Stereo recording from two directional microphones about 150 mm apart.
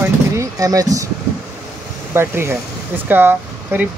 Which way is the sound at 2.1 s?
15° right (ahead or behind).